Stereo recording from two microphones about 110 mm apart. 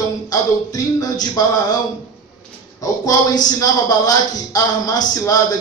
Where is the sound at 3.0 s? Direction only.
35° left (ahead or behind).